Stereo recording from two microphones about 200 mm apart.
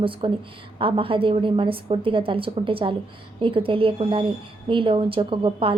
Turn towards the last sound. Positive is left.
turn(degrees=-25)  # may be behind; listen again after turning